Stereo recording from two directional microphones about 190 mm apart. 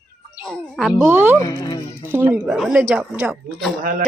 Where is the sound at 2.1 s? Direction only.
10° right (ahead or behind).